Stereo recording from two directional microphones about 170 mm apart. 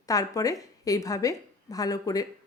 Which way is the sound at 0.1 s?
20° left (ahead or behind).